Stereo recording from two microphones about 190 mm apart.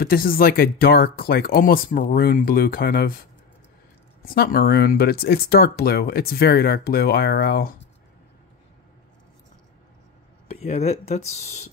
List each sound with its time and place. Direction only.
0.0 s speech: 50° left (ahead or behind)
4.2 s speech: 50° left (ahead or behind)
10.5 s speech: 35° left (ahead or behind)